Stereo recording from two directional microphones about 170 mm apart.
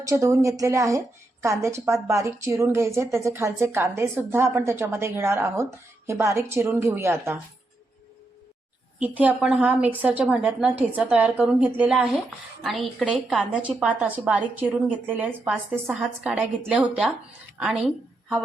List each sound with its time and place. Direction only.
0.0 s a woman's voice: 20° right (ahead or behind)
9.0 s a woman's voice: 10° right (ahead or behind)